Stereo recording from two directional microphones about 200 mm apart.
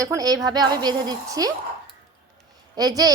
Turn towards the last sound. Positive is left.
turn(degrees=-20)  # may be behind; listen again after turning